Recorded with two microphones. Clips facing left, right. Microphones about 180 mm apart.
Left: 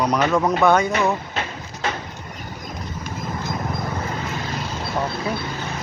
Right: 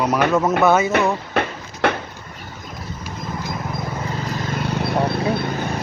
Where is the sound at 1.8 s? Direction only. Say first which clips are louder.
Right 7 dB; 65° right (ahead or behind).